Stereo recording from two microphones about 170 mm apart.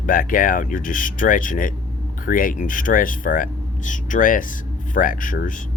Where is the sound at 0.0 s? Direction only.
55° left (ahead or behind).